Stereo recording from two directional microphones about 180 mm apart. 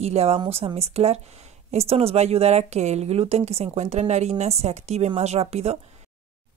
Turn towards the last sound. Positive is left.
turn(degrees=-35)  # may be behind; listen again after turning